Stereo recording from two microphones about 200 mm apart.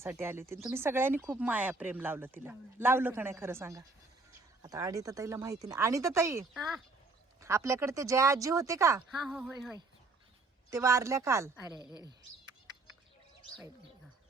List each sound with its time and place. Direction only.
0.0 s speech: 10° right (ahead or behind)
9.0 s speech: centre (ahead or behind)
10.7 s speech: 15° right (ahead or behind)